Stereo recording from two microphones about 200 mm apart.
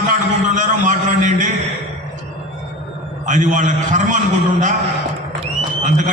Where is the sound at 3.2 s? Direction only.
40° right (ahead or behind).